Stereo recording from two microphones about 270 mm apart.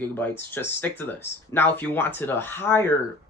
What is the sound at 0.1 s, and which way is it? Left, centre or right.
Speech, centre.